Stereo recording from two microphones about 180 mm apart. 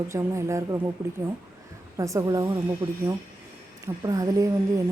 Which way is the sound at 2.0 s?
20° right (ahead or behind).